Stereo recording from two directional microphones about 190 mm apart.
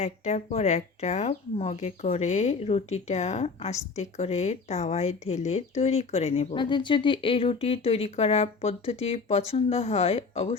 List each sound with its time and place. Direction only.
0.0 s speech: 35° left (ahead or behind)